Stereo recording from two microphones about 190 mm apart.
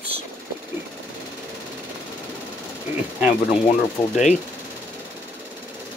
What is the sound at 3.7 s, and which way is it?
Speech, 35° left (ahead or behind).